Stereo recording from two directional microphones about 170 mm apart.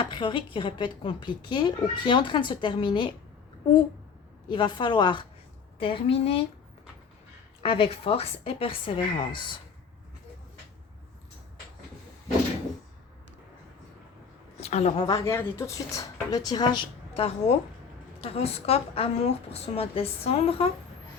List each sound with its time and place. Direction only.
0.0 s speech: 30° left (ahead or behind)
4.4 s a woman's voice: 30° left (ahead or behind)
7.6 s a woman's voice: 35° left (ahead or behind)
14.6 s a woman's voice: 40° left (ahead or behind)
15.0 s a woman's voice: 20° left (ahead or behind); by 20.7 s 35° left (ahead or behind)